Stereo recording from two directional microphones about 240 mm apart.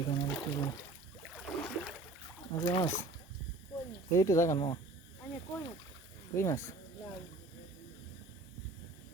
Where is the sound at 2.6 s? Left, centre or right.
Centre.